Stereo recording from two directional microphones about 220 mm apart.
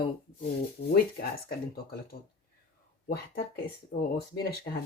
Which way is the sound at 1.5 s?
45° left (ahead or behind).